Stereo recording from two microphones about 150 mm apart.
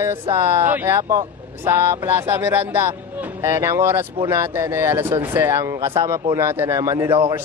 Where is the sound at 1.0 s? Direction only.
25° right (ahead or behind).